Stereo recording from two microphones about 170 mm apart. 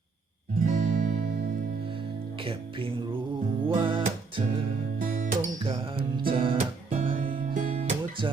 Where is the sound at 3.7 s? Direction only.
30° right (ahead or behind).